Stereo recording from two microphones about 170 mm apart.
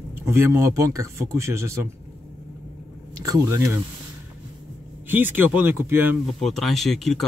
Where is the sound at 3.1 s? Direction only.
20° right (ahead or behind).